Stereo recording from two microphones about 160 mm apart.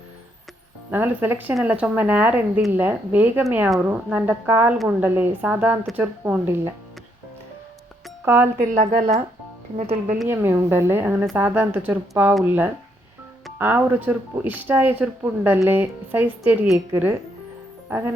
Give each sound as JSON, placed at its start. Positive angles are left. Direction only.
{"t": 0.9, "sound": "speech", "side_deg": -10}
{"t": 8.2, "sound": "speech", "side_deg": -15}
{"t": 8.9, "sound": "speech", "side_deg": -50}
{"t": 10.2, "sound": "speech", "side_deg": -15}
{"t": 17.8, "sound": "music", "side_deg": -15}